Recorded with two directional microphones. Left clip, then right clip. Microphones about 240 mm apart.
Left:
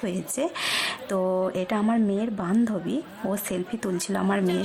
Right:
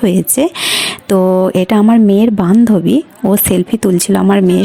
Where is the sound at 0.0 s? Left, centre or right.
Right.